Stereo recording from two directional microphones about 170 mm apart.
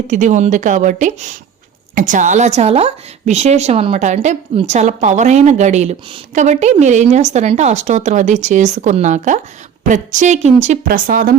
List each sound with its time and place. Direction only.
0.1 s a woman's voice: 45° right (ahead or behind)
10.8 s a woman's voice: 55° right (ahead or behind)